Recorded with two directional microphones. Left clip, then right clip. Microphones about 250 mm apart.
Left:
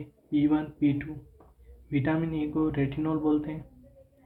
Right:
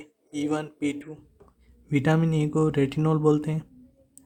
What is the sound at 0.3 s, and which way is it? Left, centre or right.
Speech, right.